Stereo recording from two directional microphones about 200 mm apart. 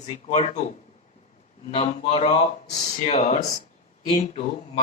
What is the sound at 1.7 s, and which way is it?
Speech, 35° left (ahead or behind).